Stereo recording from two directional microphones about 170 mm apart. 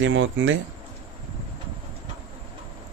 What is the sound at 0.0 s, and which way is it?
Speech, 90° right.